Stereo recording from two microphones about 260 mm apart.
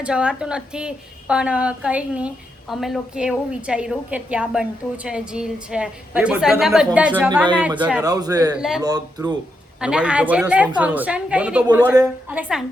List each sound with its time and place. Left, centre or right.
0.0 s a woman's voice: centre
8.5 s a woman's voice: centre
8.8 s speech: centre
9.8 s a woman's voice: centre